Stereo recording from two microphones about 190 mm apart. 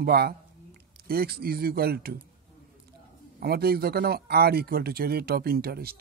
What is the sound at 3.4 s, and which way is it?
Speech, 55° right (ahead or behind).